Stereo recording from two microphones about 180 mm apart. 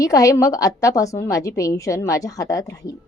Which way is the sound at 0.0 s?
20° left (ahead or behind).